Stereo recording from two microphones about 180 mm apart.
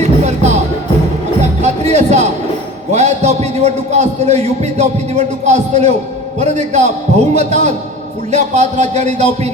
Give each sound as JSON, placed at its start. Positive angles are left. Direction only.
{"t": 0.0, "sound": "music", "side_deg": -40}
{"t": 2.9, "sound": "a man's voice", "side_deg": -40}